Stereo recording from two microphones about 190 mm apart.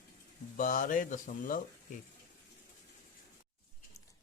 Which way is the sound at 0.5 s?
45° left (ahead or behind).